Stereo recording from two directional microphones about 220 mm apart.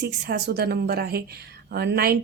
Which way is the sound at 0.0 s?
50° right (ahead or behind).